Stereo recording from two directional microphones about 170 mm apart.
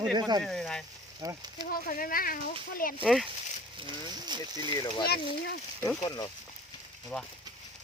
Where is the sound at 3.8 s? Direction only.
25° right (ahead or behind).